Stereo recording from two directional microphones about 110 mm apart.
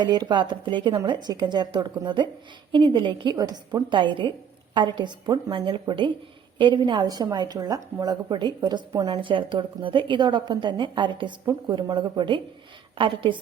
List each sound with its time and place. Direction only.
0.0 s a woman's voice: 40° right (ahead or behind)